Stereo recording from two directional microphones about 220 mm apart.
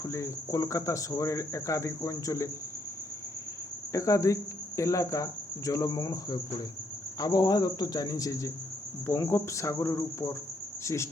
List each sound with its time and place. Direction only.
0.0 s speech: 15° left (ahead or behind)
3.9 s speech: 15° left (ahead or behind)